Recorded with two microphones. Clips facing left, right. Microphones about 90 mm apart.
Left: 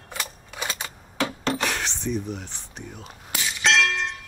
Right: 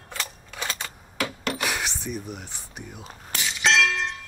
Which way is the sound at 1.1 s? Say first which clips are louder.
Left 3 dB; 30° left (ahead or behind).